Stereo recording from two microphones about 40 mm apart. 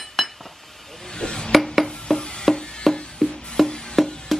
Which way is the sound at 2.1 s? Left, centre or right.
Centre.